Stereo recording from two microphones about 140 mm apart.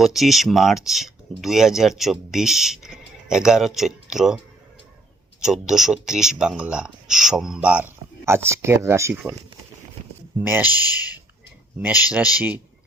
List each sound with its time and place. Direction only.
0.0 s speech: centre (ahead or behind)
5.4 s speech: 5° right (ahead or behind)
10.4 s speech: 15° right (ahead or behind)
10.7 s speech: 30° left (ahead or behind)